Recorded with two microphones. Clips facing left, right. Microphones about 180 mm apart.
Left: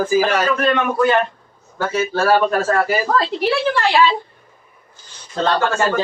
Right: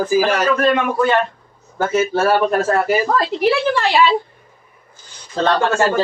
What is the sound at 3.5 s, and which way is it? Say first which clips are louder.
Speech: right 1 dB; centre (ahead or behind).